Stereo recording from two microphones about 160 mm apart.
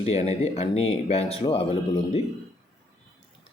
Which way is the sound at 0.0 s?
40° left (ahead or behind).